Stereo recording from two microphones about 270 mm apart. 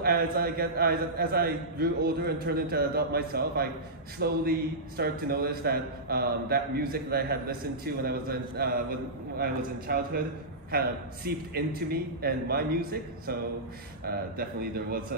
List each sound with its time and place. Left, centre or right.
0.0 s a man's voice: right